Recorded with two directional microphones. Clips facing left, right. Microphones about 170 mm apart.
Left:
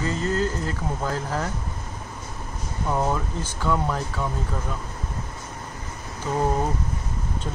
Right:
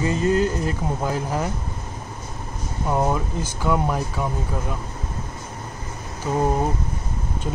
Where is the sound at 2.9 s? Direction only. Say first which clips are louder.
Right 3 dB; 15° right (ahead or behind).